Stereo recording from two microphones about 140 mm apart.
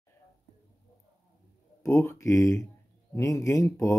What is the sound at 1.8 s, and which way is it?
Speech, 20° left (ahead or behind).